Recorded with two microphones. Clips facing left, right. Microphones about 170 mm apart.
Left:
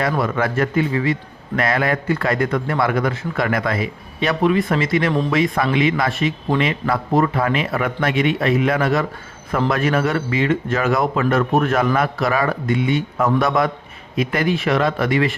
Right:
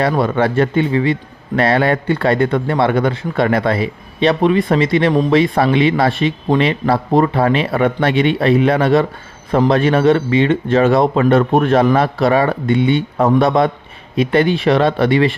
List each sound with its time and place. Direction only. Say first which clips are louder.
0.1 s a man's voice: right 5 dB; 30° right (ahead or behind)